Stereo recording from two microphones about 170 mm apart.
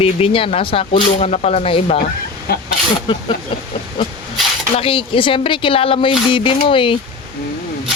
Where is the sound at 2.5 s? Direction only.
65° left (ahead or behind).